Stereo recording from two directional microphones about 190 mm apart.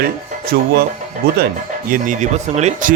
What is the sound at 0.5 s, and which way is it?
Speech, 60° right (ahead or behind).